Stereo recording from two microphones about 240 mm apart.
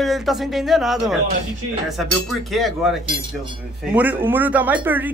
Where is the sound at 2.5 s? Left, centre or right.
Centre.